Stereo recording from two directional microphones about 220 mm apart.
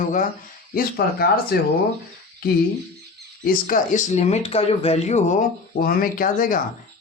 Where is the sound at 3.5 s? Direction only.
35° left (ahead or behind).